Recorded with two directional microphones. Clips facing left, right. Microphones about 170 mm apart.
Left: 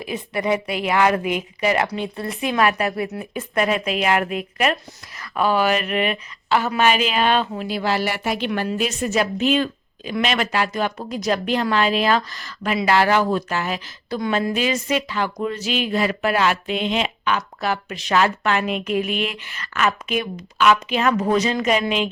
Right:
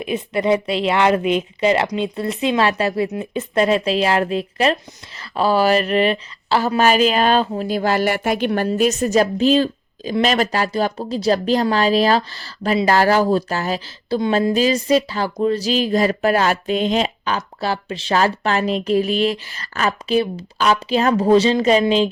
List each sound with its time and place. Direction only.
0.0 s a woman's voice: 25° right (ahead or behind)